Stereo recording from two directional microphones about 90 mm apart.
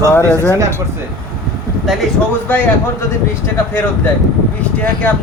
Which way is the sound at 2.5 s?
20° left (ahead or behind).